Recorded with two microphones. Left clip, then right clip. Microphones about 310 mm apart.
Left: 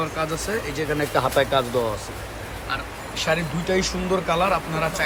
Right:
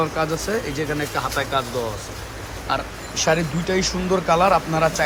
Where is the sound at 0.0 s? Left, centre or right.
Centre.